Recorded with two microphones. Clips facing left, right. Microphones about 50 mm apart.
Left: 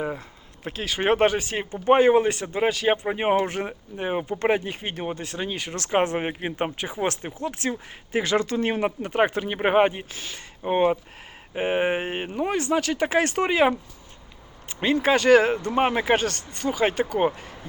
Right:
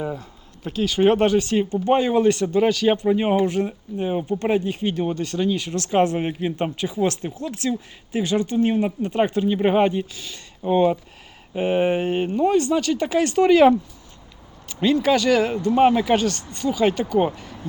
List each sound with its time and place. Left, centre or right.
0.0 s speech: left
5.0 s speech: left
5.5 s speech: left
7.7 s speech: left
9.0 s speech: left
13.5 s speech: centre
14.7 s speech: left